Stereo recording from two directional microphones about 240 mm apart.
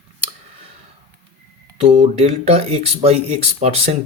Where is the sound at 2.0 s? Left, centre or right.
Right.